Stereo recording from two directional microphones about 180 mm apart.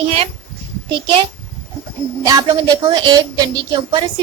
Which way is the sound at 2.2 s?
20° right (ahead or behind).